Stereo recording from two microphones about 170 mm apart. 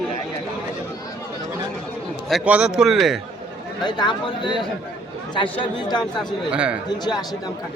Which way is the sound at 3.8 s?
25° left (ahead or behind).